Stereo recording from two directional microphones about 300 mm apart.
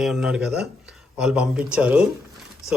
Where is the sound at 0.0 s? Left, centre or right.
Centre.